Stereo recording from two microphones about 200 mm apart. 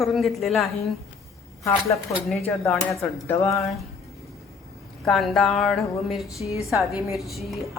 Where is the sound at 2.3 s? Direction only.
5° left (ahead or behind).